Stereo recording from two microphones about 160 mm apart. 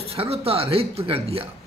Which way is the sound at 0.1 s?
40° right (ahead or behind).